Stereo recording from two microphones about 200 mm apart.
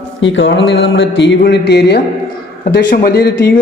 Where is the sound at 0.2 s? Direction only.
65° left (ahead or behind).